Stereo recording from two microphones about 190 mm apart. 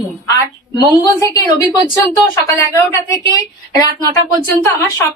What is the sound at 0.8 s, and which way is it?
A woman's voice, 15° left (ahead or behind).